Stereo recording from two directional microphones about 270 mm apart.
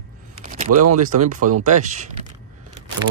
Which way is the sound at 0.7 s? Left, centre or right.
Right.